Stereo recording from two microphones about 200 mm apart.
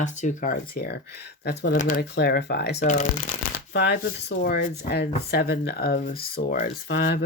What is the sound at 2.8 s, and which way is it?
Speech, 35° left (ahead or behind).